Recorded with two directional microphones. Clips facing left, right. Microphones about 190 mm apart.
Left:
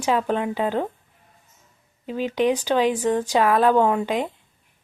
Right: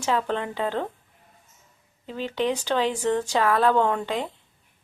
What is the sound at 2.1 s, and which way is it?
Speech, 15° left (ahead or behind).